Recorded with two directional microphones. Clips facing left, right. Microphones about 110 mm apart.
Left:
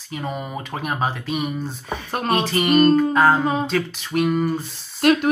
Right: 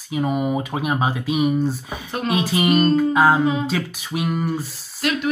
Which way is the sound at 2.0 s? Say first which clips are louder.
Left 1 dB; 45° left (ahead or behind).